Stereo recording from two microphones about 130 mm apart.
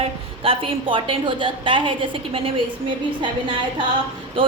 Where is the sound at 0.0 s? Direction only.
40° right (ahead or behind).